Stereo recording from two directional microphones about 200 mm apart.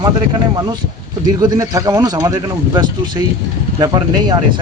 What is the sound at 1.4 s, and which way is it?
Speech, 20° right (ahead or behind).